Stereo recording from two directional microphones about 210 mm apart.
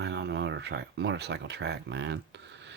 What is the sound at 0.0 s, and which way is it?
Speech, 55° right (ahead or behind).